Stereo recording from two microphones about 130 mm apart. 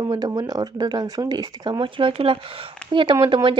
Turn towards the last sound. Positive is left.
turn(degrees=-40)  # may be behind; listen again after turning